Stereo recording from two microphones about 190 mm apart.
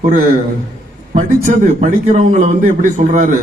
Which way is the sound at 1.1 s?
40° right (ahead or behind).